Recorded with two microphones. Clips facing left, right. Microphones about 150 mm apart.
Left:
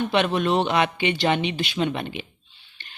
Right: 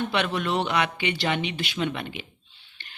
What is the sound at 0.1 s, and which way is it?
Speech, 20° left (ahead or behind).